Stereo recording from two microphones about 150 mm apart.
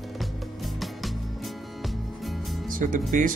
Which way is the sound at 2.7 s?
65° right (ahead or behind).